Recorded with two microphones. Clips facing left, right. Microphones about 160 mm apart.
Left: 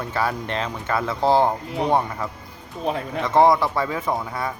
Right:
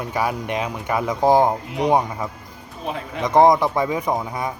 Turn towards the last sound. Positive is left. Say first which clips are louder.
# right 2 dB
turn(degrees=-15)  # may be behind; listen again after turning